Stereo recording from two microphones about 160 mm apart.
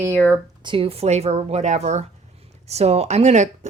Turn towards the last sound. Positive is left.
turn(degrees=-45)  # may be behind; listen again after turning